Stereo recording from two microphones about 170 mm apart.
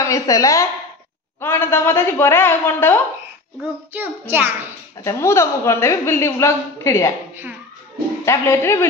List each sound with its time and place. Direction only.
0.0 s a woman's voice: 20° left (ahead or behind)
3.9 s a child's voice: 10° right (ahead or behind)
5.0 s a woman's voice: 15° left (ahead or behind)
8.3 s a woman's voice: 15° left (ahead or behind)